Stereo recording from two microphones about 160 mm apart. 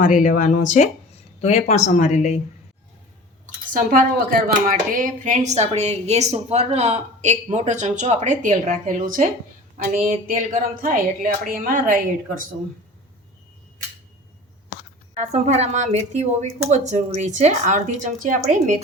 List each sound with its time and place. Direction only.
0.0 s speech: 50° left (ahead or behind)
3.4 s a woman's voice: 55° right (ahead or behind)
15.1 s speech: 45° right (ahead or behind)